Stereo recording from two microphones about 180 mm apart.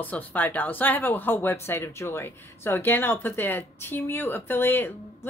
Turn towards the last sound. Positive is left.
turn(degrees=10)  # may be behind; listen again after turning